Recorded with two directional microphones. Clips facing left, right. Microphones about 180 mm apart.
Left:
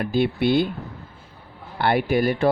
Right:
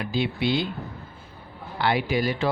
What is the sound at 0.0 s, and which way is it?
Speech, 55° left (ahead or behind).